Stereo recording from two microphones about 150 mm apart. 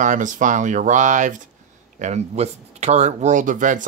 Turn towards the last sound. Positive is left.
turn(degrees=-60)  # may be behind; listen again after turning